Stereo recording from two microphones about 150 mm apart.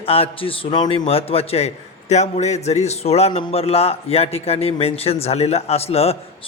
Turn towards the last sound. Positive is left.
turn(degrees=40)  # may be behind; listen again after turning